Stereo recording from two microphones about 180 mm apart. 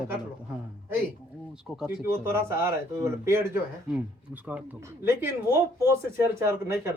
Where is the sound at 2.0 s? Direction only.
15° right (ahead or behind).